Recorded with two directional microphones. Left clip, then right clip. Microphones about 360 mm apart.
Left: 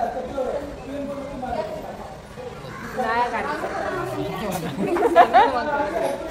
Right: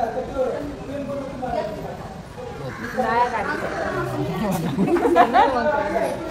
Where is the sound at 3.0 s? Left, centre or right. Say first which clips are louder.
Right 2 dB; centre.